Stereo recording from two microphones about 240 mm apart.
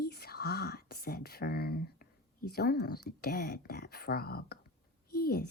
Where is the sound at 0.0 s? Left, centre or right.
Left.